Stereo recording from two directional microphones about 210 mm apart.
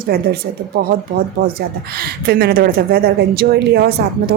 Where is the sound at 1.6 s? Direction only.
45° right (ahead or behind).